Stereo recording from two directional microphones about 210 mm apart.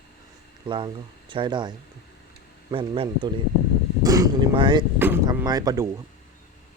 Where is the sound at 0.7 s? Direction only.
25° right (ahead or behind).